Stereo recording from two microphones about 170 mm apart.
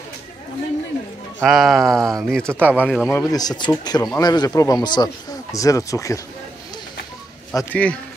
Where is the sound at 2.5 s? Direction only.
10° right (ahead or behind).